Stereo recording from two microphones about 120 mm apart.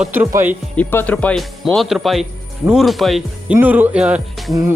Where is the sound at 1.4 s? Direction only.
Centre (ahead or behind).